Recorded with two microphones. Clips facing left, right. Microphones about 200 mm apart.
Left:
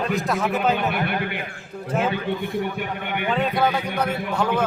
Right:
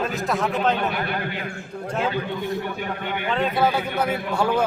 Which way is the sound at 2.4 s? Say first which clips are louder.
Left 1 dB; 55° left (ahead or behind).